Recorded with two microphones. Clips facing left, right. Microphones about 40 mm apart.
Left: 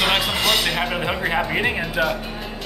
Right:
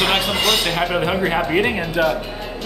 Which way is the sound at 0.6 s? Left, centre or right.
Centre.